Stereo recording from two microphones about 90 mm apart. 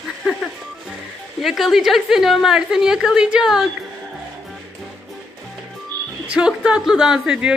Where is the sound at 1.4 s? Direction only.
Centre (ahead or behind).